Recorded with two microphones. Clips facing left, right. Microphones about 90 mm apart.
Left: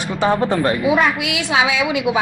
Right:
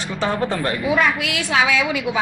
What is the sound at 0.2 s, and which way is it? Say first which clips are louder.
A woman's voice: left 5 dB; 15° left (ahead or behind).